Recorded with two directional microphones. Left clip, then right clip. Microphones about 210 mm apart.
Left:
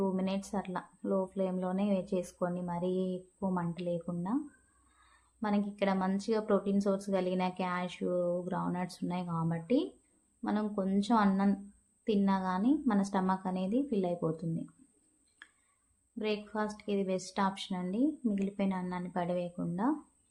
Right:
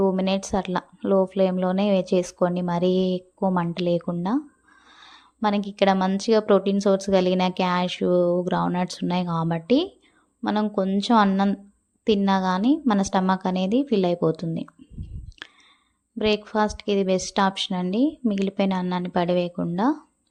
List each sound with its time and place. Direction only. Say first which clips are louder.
0.0 s a woman's voice: right 12 dB; 40° right (ahead or behind)
16.1 s a woman's voice: right 13 dB; 40° right (ahead or behind)